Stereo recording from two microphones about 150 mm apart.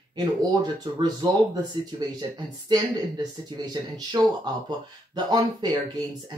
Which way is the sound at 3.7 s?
25° right (ahead or behind).